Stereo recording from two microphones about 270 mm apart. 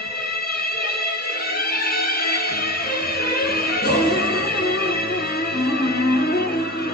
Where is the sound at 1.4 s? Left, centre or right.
Left.